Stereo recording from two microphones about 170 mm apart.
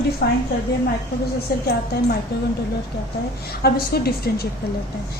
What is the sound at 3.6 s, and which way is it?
Speech, 65° left (ahead or behind).